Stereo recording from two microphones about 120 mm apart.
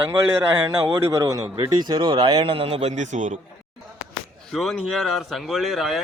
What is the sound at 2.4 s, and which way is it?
A man's voice, 50° right (ahead or behind).